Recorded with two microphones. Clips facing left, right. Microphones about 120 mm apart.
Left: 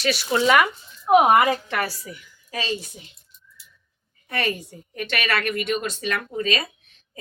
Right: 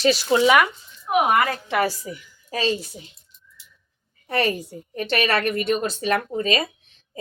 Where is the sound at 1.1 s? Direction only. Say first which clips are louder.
Left 4 dB; 30° left (ahead or behind).